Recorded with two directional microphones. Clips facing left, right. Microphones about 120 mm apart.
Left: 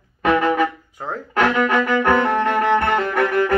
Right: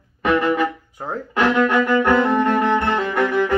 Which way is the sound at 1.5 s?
Centre (ahead or behind).